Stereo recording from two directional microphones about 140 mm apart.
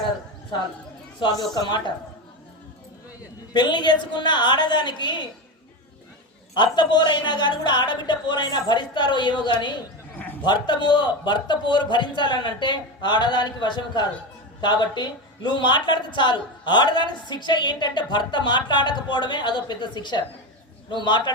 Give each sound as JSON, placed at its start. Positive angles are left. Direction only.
{"t": 1.2, "sound": "a woman's voice", "side_deg": 30}
{"t": 3.5, "sound": "a woman's voice", "side_deg": 35}
{"t": 6.6, "sound": "a woman's voice", "side_deg": 30}